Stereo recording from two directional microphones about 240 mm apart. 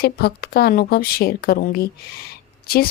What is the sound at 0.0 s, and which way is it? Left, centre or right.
Speech, left.